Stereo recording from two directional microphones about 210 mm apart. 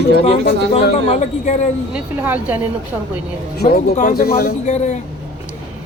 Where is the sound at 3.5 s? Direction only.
45° left (ahead or behind).